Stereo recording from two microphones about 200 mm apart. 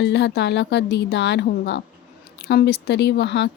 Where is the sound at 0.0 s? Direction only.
60° left (ahead or behind).